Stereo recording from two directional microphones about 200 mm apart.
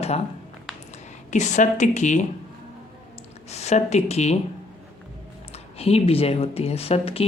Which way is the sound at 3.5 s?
35° left (ahead or behind).